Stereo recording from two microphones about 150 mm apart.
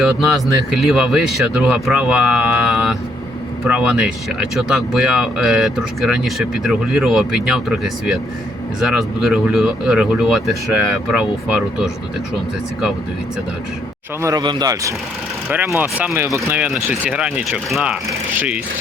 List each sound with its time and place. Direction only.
0.0 s speech: centre (ahead or behind)
14.2 s speech: 25° right (ahead or behind)
15.8 s speech: 10° right (ahead or behind)